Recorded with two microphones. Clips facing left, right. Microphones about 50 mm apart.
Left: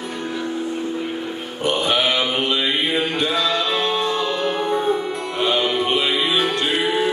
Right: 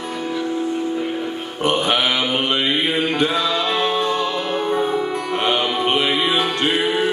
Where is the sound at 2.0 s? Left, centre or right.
Centre.